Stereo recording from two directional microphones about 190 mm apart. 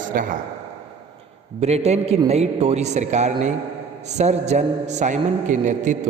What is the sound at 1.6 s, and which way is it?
A man's voice, 35° right (ahead or behind).